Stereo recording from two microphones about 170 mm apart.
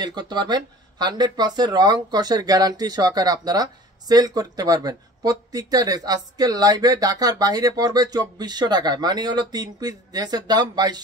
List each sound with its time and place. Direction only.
0.0 s speech: 25° right (ahead or behind)